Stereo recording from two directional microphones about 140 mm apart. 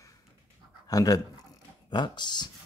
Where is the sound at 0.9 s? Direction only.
25° left (ahead or behind).